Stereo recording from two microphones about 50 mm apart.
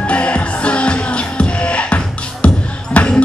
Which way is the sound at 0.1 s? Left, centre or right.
Left.